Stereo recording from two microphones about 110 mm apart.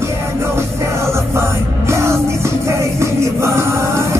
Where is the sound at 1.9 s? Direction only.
25° right (ahead or behind).